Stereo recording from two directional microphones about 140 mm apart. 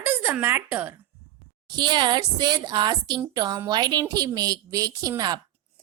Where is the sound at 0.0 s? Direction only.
15° right (ahead or behind).